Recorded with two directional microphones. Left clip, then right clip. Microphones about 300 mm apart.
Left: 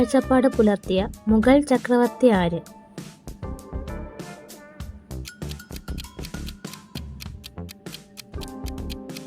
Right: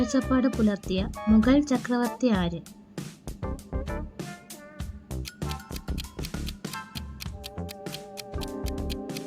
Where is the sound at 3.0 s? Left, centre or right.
Centre.